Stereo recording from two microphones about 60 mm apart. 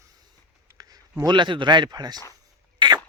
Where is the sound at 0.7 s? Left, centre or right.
Right.